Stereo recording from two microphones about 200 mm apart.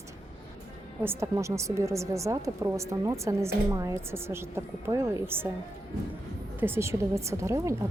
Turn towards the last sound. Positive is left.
turn(degrees=-15)  # may be behind; listen again after turning